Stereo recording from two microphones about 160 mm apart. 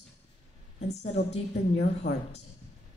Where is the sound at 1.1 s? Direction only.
45° left (ahead or behind).